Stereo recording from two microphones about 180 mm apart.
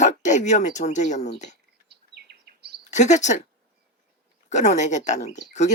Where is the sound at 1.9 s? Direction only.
65° right (ahead or behind).